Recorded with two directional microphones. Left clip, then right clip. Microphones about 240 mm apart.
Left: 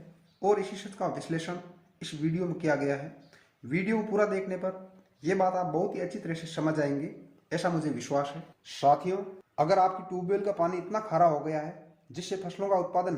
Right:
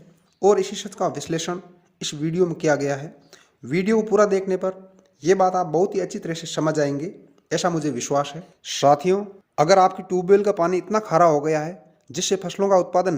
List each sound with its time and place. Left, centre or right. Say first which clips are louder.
0.3 s speech: right 9 dB; right